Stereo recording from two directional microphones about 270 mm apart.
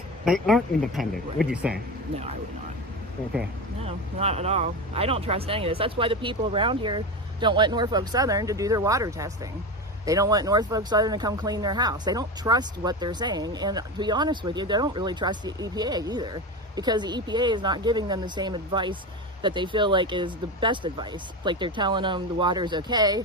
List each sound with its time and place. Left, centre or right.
0.3 s speech: centre
3.8 s speech: right